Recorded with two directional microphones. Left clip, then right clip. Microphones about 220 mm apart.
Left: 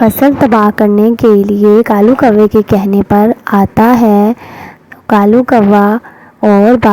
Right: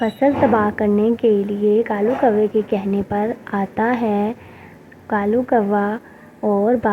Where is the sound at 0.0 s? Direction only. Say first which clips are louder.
Left 8 dB; 45° left (ahead or behind).